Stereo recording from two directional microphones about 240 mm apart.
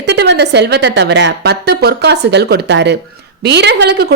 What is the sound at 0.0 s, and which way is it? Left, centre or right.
Speech, right.